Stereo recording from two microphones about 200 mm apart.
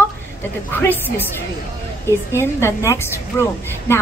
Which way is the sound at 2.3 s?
15° left (ahead or behind).